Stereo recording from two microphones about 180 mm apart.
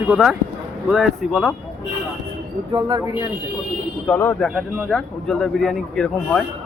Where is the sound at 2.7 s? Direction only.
20° right (ahead or behind).